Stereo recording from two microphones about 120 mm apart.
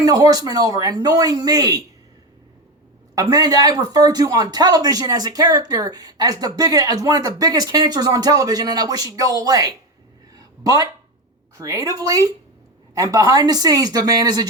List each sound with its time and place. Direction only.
0.0 s speech: 30° right (ahead or behind)
3.2 s speech: 35° right (ahead or behind)
10.3 s a sound: 30° right (ahead or behind)
11.5 s speech: 30° right (ahead or behind)